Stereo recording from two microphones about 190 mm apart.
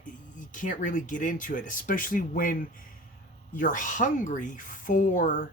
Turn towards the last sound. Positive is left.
turn(degrees=40)  # may be behind; listen again after turning